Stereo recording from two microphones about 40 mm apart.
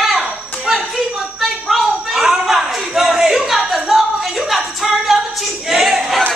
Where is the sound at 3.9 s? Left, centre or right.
Centre.